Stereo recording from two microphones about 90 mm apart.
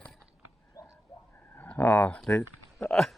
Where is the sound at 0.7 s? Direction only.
40° left (ahead or behind).